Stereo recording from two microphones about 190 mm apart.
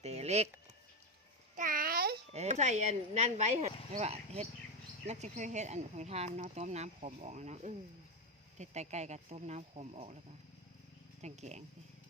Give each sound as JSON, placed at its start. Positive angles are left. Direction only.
{"t": 0.0, "sound": "a sound", "side_deg": -35}
{"t": 1.5, "sound": "babbling", "side_deg": -45}
{"t": 2.3, "sound": "speech", "side_deg": -35}
{"t": 11.2, "sound": "speech", "side_deg": -35}